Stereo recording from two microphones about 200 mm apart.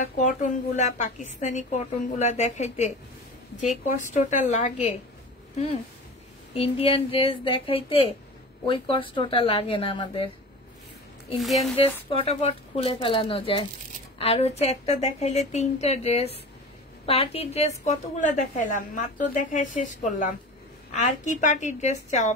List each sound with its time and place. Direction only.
0.2 s a woman's voice: 35° left (ahead or behind)
6.5 s speech: 30° left (ahead or behind)
11.3 s a woman's voice: centre (ahead or behind)
11.7 s a woman's voice: 30° left (ahead or behind)